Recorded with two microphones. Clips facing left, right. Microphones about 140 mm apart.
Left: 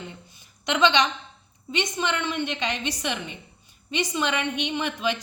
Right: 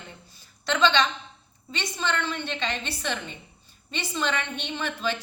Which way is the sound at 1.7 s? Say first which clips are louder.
Left 3 dB; 15° left (ahead or behind).